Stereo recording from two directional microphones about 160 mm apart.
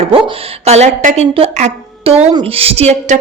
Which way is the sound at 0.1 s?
35° right (ahead or behind).